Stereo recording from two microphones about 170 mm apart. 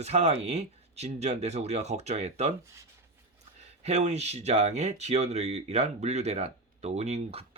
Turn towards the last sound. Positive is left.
turn(degrees=-40)  # may be behind; listen again after turning